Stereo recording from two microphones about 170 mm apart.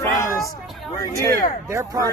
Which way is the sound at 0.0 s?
20° left (ahead or behind).